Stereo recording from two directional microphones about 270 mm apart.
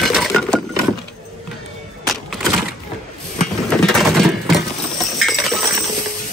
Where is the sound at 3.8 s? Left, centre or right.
Centre.